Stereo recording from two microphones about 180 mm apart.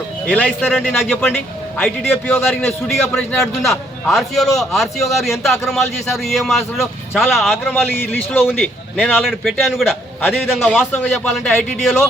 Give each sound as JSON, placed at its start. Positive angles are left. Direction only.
{"t": 0.3, "sound": "a man's voice", "side_deg": 10}
{"t": 0.6, "sound": "a man's voice", "side_deg": -5}
{"t": 1.1, "sound": "a man's voice", "side_deg": 10}
{"t": 2.6, "sound": "a man's voice", "side_deg": 10}
{"t": 7.6, "sound": "a man's voice", "side_deg": 10}